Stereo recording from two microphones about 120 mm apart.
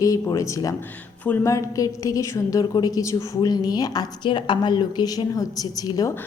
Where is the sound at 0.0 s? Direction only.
30° left (ahead or behind).